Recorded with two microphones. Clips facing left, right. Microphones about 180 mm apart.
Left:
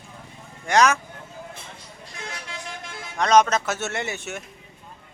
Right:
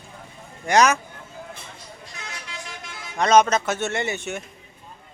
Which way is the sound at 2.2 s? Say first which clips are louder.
Left 3 dB; 50° left (ahead or behind).